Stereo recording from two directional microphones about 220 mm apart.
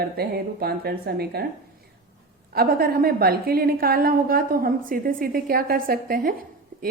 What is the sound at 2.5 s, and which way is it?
A woman's voice, 45° right (ahead or behind).